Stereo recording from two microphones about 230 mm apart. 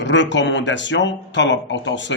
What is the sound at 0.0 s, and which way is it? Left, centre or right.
Speech, left.